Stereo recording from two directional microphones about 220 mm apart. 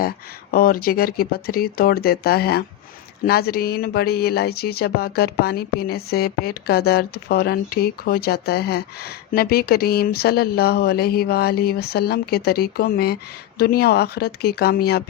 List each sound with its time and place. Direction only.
0.5 s speech: 45° left (ahead or behind)